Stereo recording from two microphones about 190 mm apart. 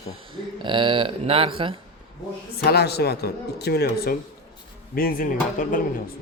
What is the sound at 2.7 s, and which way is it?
Speech, 60° left (ahead or behind).